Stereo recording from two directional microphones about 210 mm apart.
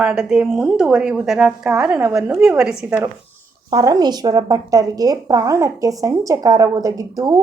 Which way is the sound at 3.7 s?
15° right (ahead or behind).